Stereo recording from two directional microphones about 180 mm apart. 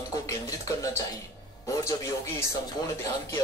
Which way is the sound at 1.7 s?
20° left (ahead or behind).